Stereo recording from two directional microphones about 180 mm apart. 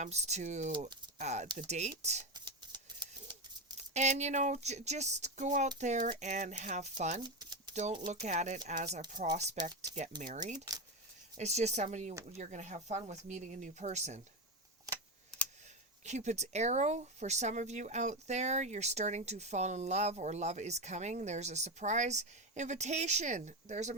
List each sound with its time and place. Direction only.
0.0 s speech: 40° right (ahead or behind)
2.3 s a sound: 25° right (ahead or behind)
3.8 s speech: 40° right (ahead or behind)
7.2 s typewriter: 25° right (ahead or behind)
7.7 s speech: 40° right (ahead or behind)
16.0 s speech: 40° right (ahead or behind)